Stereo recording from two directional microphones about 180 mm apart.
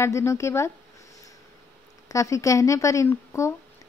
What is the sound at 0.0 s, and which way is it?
Speech, 15° left (ahead or behind).